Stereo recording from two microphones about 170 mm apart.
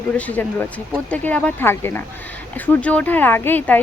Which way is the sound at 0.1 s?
10° left (ahead or behind).